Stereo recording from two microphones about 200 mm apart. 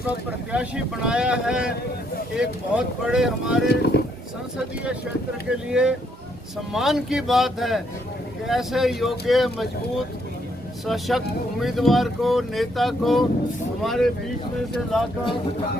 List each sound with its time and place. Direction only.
0.3 s speech: 5° right (ahead or behind)
3.9 s speech: 55° left (ahead or behind)
5.5 s speech: 5° right (ahead or behind)
10.8 s speech: centre (ahead or behind)